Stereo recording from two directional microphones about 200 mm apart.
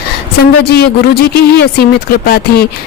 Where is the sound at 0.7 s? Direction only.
50° left (ahead or behind).